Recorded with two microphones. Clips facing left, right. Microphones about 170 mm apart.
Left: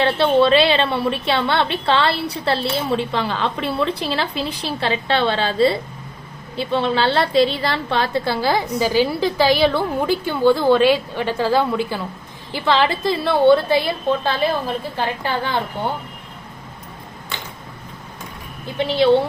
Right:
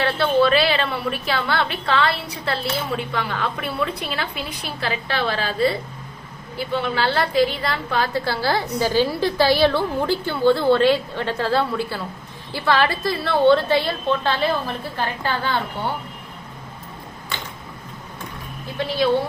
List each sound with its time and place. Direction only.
0.0 s a woman's voice: 25° left (ahead or behind)
18.8 s a woman's voice: 25° left (ahead or behind)